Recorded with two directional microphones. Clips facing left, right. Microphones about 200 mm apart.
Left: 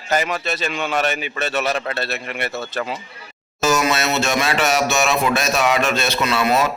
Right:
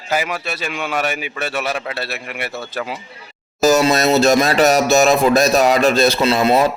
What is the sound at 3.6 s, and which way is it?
Music, 35° right (ahead or behind).